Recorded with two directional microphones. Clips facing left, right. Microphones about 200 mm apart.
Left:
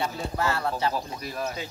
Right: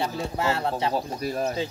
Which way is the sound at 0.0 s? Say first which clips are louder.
Right 2 dB; 25° right (ahead or behind).